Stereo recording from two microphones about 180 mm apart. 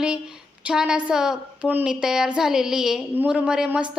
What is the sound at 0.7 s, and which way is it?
A woman's voice, 5° right (ahead or behind).